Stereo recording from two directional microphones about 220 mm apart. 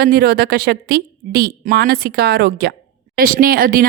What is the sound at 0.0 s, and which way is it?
A woman's voice, 45° right (ahead or behind).